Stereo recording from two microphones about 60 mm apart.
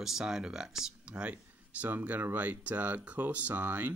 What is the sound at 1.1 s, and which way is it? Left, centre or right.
Speech, right.